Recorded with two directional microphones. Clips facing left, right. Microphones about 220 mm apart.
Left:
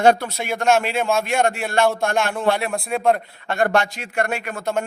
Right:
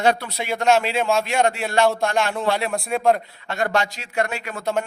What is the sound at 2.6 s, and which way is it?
Speech, centre (ahead or behind).